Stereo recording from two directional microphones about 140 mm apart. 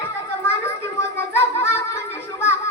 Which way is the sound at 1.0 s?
20° left (ahead or behind).